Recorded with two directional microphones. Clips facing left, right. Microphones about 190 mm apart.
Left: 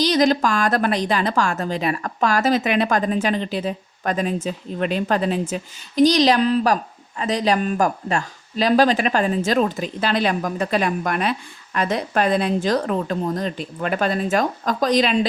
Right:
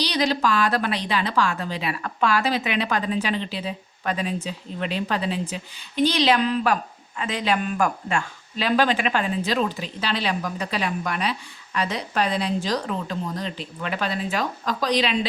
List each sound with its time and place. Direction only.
0.0 s speech: 45° left (ahead or behind)